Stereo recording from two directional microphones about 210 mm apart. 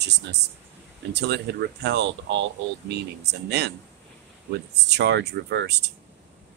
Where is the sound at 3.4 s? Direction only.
50° right (ahead or behind).